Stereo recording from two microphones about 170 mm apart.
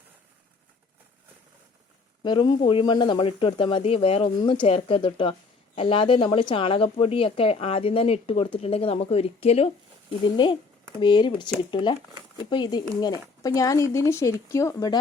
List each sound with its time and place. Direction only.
2.2 s speech: 25° left (ahead or behind)